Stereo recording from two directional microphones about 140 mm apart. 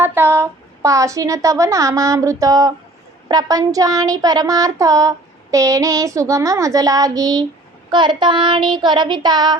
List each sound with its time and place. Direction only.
0.0 s a woman's voice: 15° right (ahead or behind)
3.2 s child singing: 25° right (ahead or behind)